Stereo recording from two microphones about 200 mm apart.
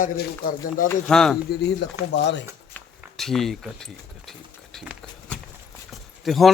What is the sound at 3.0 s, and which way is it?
Speech, centre (ahead or behind).